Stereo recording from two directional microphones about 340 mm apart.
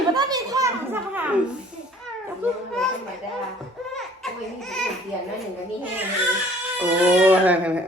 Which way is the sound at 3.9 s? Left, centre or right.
Centre.